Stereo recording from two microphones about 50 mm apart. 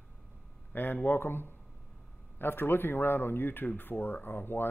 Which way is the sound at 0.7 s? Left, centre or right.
Left.